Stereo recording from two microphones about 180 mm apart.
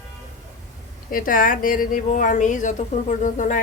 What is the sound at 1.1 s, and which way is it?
Speech, 50° left (ahead or behind).